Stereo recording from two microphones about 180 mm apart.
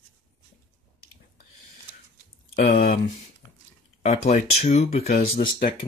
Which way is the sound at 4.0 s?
40° left (ahead or behind).